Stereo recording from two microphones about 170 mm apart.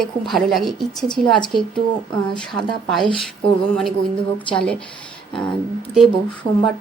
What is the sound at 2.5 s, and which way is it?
Speech, centre (ahead or behind).